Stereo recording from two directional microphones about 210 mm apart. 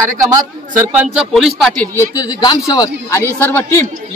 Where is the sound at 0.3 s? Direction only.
10° right (ahead or behind).